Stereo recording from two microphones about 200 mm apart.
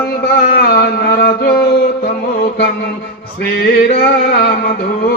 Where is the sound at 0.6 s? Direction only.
55° left (ahead or behind).